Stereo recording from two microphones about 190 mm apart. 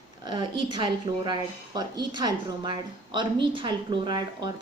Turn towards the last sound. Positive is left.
turn(degrees=-20)  # may be behind; listen again after turning